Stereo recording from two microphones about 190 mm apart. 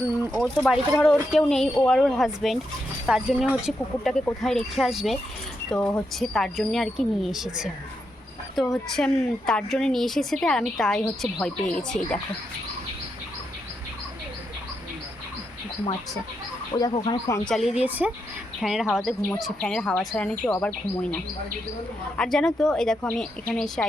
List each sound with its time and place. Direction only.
0.3 s a woman's voice: centre (ahead or behind)
16.7 s speech: 20° left (ahead or behind)
17.4 s a woman's voice: centre (ahead or behind)
22.2 s a woman's voice: centre (ahead or behind)